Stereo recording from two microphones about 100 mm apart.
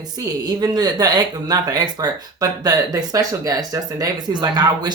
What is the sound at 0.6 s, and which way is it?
Speech, 40° right (ahead or behind).